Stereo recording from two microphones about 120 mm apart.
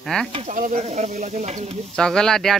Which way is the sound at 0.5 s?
85° right.